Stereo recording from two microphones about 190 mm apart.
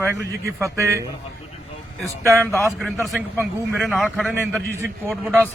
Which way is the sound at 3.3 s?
10° right (ahead or behind).